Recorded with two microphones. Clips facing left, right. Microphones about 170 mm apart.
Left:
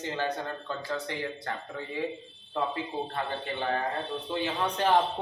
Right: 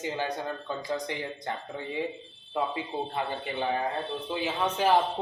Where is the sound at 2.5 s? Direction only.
15° right (ahead or behind).